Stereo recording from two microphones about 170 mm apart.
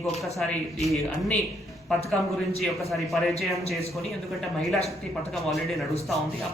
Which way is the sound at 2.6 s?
Centre (ahead or behind).